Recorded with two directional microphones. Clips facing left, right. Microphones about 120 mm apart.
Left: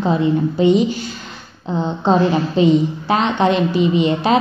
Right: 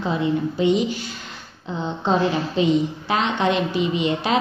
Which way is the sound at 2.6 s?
35° left (ahead or behind).